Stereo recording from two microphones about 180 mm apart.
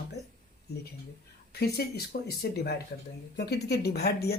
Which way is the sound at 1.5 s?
60° left (ahead or behind).